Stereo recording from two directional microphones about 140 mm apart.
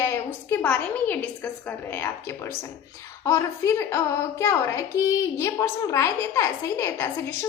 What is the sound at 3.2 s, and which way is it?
A woman's voice, 20° left (ahead or behind).